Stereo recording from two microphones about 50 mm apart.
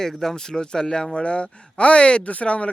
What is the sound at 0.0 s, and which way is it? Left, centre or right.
Speech, centre.